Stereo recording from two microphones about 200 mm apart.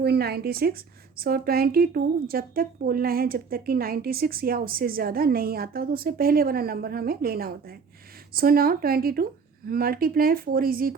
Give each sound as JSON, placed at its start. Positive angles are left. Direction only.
{"t": 0.0, "sound": "a woman's voice", "side_deg": -55}